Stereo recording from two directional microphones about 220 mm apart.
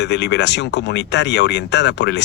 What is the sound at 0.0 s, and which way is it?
Speech, 50° left (ahead or behind).